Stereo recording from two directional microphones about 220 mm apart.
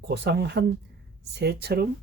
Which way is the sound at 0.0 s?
50° right (ahead or behind).